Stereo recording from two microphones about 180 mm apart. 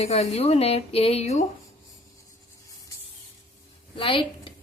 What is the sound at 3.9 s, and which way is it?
Speech, 30° left (ahead or behind).